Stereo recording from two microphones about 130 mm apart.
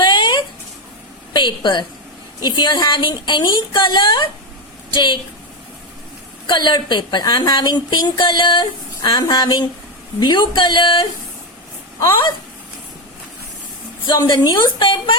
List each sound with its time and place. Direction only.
0.0 s a sound: 35° left (ahead or behind)
1.3 s a woman's voice: 35° left (ahead or behind)
6.5 s a woman's voice: 35° left (ahead or behind)
14.1 s a woman's voice: 30° left (ahead or behind)